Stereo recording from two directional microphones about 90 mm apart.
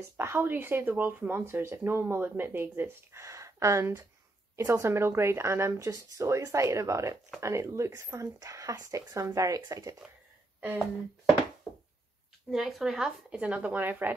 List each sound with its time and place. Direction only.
0.2 s speech: 25° right (ahead or behind)
12.4 s speech: 5° right (ahead or behind); by 14.1 s 20° right (ahead or behind)